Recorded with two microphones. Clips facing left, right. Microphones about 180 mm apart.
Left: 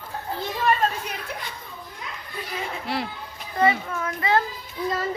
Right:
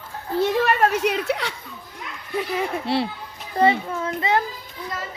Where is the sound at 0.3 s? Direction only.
70° right (ahead or behind).